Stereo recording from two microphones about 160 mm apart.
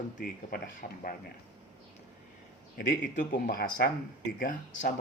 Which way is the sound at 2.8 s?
55° left (ahead or behind).